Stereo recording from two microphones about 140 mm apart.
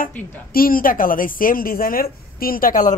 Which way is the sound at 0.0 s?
90° left.